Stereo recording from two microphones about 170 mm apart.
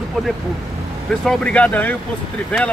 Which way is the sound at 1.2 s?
5° left (ahead or behind).